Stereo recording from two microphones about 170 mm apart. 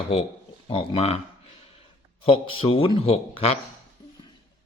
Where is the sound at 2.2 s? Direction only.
30° left (ahead or behind).